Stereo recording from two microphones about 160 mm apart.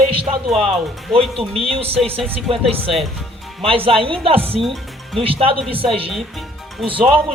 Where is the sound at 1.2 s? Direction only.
35° right (ahead or behind).